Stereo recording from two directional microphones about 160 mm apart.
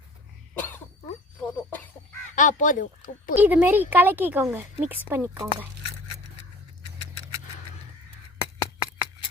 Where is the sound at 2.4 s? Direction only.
55° left (ahead or behind).